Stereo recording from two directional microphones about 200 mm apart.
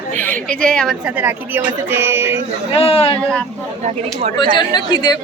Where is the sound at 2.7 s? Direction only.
30° left (ahead or behind).